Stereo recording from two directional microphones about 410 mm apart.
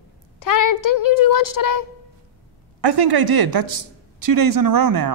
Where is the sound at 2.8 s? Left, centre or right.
Right.